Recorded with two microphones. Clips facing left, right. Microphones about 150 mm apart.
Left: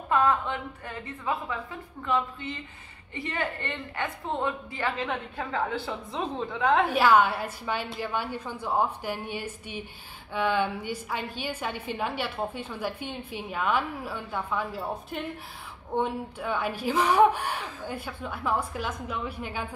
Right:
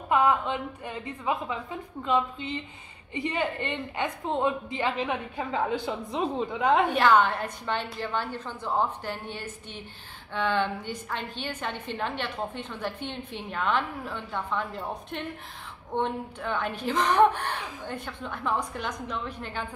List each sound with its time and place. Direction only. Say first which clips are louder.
0.1 s a woman's voice: right 1 dB; 15° right (ahead or behind)
6.9 s a woman's voice: even; 10° left (ahead or behind)